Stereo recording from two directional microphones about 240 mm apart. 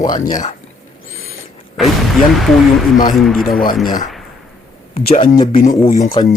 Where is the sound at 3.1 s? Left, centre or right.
Centre.